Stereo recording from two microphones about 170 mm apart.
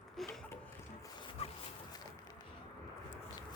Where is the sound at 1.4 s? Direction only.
35° left (ahead or behind).